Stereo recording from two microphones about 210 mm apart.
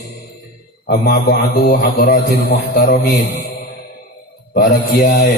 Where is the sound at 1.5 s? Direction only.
50° left (ahead or behind).